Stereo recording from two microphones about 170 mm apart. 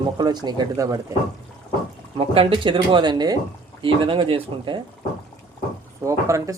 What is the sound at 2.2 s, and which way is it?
Speech, 30° right (ahead or behind).